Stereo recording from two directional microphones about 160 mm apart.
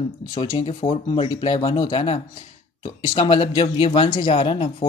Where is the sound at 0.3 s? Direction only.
30° left (ahead or behind).